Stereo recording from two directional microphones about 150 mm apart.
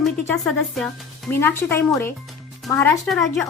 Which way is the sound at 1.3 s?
15° left (ahead or behind).